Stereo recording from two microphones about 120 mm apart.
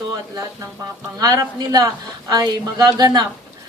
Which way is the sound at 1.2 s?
30° right (ahead or behind).